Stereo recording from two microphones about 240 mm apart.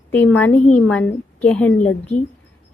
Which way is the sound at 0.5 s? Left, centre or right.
Left.